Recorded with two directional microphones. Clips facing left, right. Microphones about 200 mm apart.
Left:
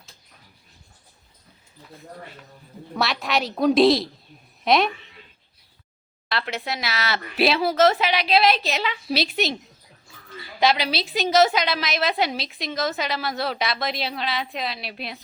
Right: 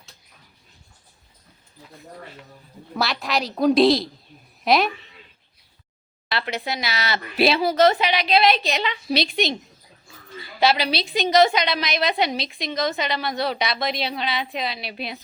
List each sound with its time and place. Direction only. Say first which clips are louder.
2.9 s a woman's voice: even; centre (ahead or behind)
6.2 s a woman's voice: right 1 dB; centre (ahead or behind)
10.6 s a woman's voice: right 1 dB; centre (ahead or behind)